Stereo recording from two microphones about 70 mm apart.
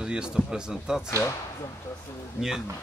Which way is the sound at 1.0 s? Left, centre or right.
Left.